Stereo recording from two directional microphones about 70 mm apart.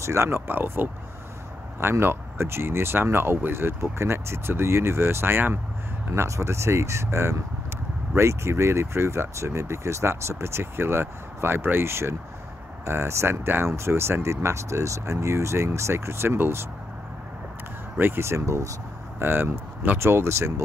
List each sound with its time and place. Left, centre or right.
0.0 s speech: right
6.0 s speech: right
17.9 s speech: right
19.1 s speech: right